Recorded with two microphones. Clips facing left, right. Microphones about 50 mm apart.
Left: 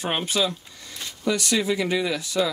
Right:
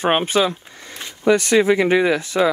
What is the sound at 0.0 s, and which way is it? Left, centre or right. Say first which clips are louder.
Speech: right 7 dB; right.